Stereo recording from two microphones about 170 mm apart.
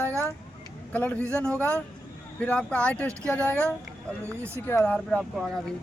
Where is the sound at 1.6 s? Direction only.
15° right (ahead or behind).